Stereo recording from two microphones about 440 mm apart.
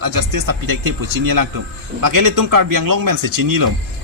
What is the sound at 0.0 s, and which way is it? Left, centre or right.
A man's voice, right.